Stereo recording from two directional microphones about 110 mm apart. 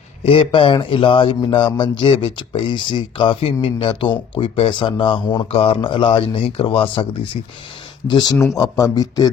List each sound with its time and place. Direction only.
0.2 s speech: 55° left (ahead or behind)
5.5 s speech: 60° left (ahead or behind)
8.0 s speech: 40° left (ahead or behind)
8.4 s speech: 30° left (ahead or behind)